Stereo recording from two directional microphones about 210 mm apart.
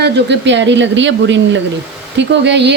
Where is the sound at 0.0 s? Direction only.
55° right (ahead or behind).